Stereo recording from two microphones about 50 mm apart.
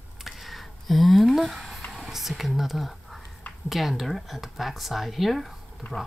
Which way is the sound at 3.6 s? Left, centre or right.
Centre.